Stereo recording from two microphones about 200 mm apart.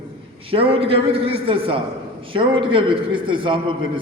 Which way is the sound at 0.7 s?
30° right (ahead or behind).